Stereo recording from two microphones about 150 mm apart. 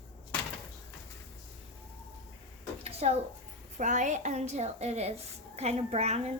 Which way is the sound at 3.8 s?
55° right (ahead or behind).